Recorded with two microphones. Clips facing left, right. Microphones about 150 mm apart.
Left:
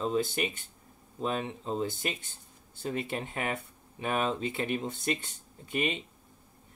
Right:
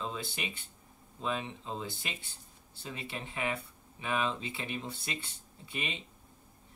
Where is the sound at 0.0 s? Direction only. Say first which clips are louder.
Left 9 dB; 45° left (ahead or behind).